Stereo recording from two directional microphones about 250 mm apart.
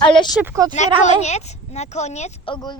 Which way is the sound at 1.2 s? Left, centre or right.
Left.